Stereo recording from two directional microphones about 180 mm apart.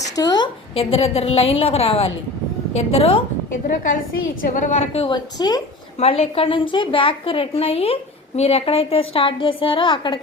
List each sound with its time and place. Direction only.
0.2 s a woman's voice: 25° left (ahead or behind)
4.4 s a woman's voice: 45° left (ahead or behind)
5.0 s a woman's voice: 25° left (ahead or behind)
6.0 s a woman's voice: 35° left (ahead or behind)